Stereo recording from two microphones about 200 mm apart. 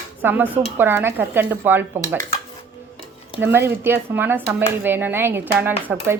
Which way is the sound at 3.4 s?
10° right (ahead or behind).